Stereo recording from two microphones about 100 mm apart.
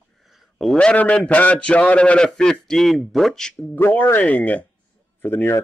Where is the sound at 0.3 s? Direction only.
Centre (ahead or behind).